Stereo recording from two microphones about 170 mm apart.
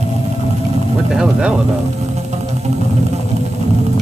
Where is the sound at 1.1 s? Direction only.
5° right (ahead or behind).